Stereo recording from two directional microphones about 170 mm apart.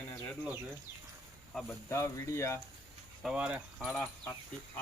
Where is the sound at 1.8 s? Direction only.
15° left (ahead or behind).